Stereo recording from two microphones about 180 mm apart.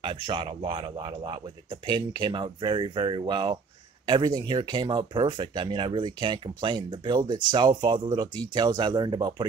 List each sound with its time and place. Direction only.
0.0 s speech: 25° right (ahead or behind)